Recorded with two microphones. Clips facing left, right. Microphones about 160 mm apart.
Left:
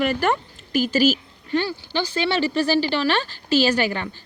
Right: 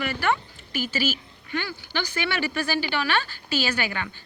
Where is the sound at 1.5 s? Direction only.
30° left (ahead or behind).